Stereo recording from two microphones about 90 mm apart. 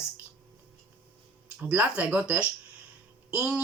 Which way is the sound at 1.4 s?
15° right (ahead or behind).